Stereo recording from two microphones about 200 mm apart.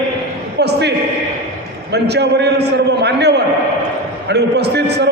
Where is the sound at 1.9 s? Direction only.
55° right (ahead or behind).